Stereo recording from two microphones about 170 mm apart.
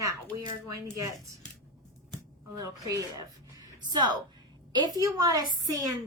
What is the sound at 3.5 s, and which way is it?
Music, 25° right (ahead or behind).